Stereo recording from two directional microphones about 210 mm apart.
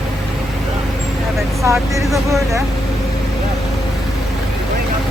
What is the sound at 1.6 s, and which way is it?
Speech, 15° right (ahead or behind).